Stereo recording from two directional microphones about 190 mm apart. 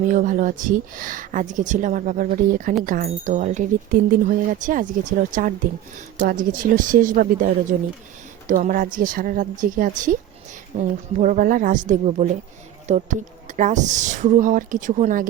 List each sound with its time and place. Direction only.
0.1 s a woman's voice: 45° right (ahead or behind)